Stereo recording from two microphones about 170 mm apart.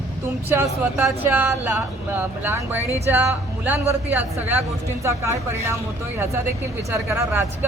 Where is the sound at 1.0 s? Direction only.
10° right (ahead or behind).